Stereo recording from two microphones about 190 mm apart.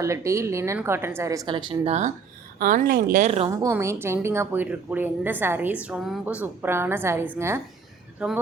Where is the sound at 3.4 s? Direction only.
15° right (ahead or behind).